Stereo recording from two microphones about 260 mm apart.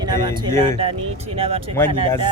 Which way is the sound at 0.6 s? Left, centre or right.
Right.